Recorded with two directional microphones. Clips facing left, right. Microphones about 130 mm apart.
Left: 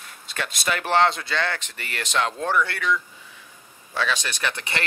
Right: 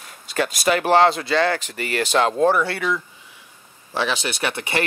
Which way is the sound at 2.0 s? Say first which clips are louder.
Right 8 dB; 30° right (ahead or behind).